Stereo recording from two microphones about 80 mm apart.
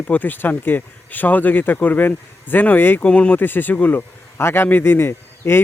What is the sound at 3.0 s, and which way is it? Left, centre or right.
A man's voice, centre.